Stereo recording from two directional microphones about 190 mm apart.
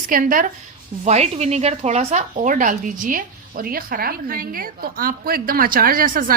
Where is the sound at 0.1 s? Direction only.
45° right (ahead or behind).